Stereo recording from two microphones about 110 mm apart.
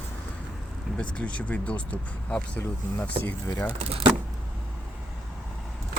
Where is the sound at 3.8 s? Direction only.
65° right (ahead or behind).